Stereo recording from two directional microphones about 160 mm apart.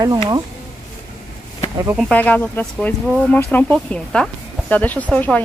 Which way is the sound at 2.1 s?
10° left (ahead or behind).